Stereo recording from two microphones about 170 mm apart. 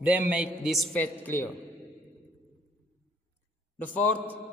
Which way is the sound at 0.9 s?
10° left (ahead or behind).